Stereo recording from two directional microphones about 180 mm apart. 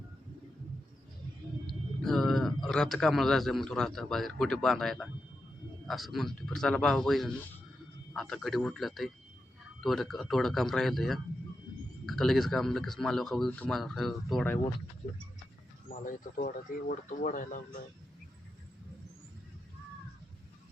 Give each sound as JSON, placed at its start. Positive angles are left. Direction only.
{"t": 2.0, "sound": "a man's voice", "side_deg": 0}
{"t": 15.9, "sound": "speech", "side_deg": 50}